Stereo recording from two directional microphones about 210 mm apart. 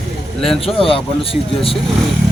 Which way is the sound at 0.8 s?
25° left (ahead or behind).